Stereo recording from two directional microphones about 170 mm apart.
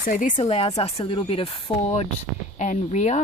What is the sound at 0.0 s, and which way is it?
Speech, 50° left (ahead or behind).